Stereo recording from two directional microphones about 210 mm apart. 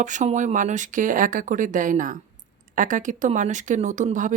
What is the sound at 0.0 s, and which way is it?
Speech, 35° right (ahead or behind).